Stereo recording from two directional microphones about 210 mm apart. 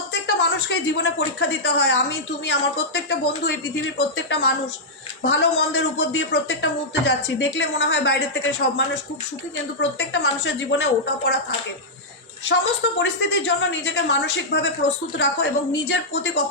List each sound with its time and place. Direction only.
0.1 s speech: 55° left (ahead or behind)
3.9 s speech: 55° left (ahead or behind)
10.0 s speech: 55° left (ahead or behind)
12.5 s speech: 55° left (ahead or behind)